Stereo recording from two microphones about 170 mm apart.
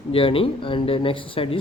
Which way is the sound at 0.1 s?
30° left (ahead or behind).